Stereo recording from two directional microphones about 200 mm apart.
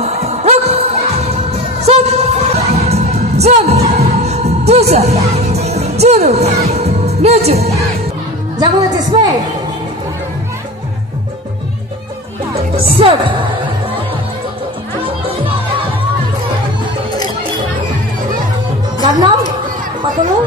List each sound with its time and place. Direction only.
0.0 s music: 30° right (ahead or behind)
8.5 s a woman's voice: 20° right (ahead or behind)
12.9 s a woman's voice: 25° right (ahead or behind)
19.0 s music: 20° right (ahead or behind)